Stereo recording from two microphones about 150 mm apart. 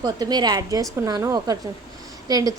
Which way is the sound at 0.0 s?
30° right (ahead or behind).